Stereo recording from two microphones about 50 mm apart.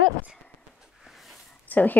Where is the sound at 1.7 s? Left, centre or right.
Left.